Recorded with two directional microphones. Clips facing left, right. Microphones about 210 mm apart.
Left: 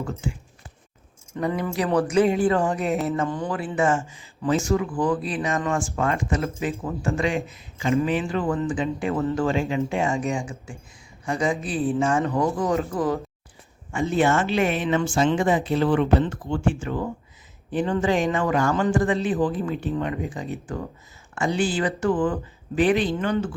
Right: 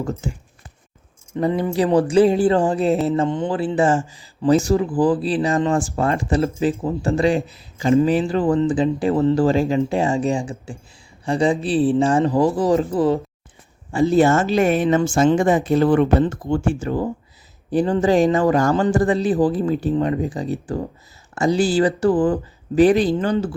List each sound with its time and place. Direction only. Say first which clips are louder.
0.0 s speech: right 4 dB; 40° right (ahead or behind)
1.5 s speech: right 6 dB; 25° right (ahead or behind)